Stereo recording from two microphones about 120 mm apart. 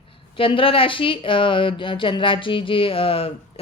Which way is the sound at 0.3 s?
45° left (ahead or behind).